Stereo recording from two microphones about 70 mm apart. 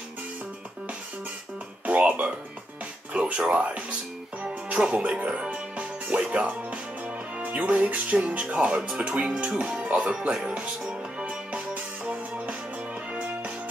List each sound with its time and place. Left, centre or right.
1.9 s speech: right
4.4 s music: centre
7.3 s speech: right
8.9 s music: centre